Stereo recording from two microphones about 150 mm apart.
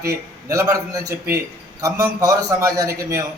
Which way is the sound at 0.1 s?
20° right (ahead or behind).